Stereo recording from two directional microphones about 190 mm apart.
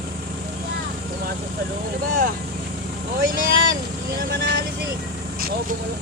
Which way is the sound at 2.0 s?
45° right (ahead or behind).